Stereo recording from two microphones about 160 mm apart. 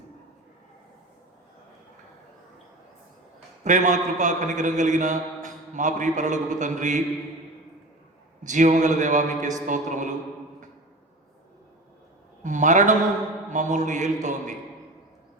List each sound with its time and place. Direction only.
3.6 s a man's voice: 50° right (ahead or behind)
8.4 s a man's voice: 50° right (ahead or behind)
12.4 s a man's voice: 50° right (ahead or behind)